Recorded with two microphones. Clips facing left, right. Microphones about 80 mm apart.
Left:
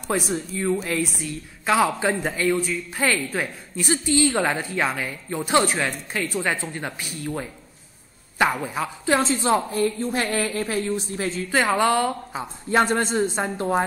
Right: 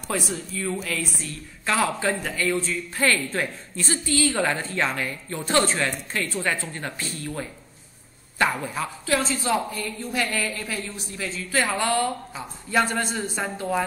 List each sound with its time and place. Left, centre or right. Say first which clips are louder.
0.3 s a woman's voice: left 5 dB; left
11.5 s a woman's voice: left 4 dB; left